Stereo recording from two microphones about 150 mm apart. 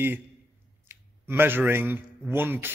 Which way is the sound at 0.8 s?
15° right (ahead or behind).